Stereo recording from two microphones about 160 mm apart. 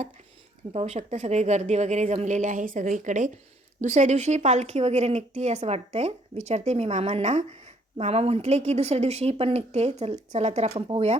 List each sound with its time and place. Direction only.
0.7 s a woman's voice: 45° right (ahead or behind)
10.8 s speech: 35° right (ahead or behind)